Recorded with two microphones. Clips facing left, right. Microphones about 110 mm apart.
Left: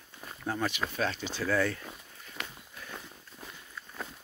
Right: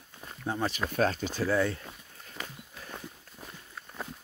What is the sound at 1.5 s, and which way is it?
Speech, 25° right (ahead or behind).